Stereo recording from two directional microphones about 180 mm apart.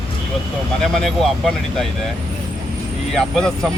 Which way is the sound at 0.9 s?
Centre (ahead or behind).